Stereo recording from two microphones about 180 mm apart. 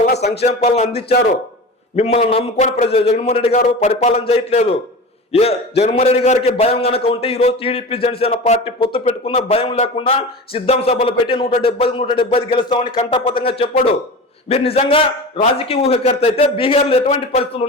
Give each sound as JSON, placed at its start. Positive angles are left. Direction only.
{"t": 0.3, "sound": "a man's voice", "side_deg": 35}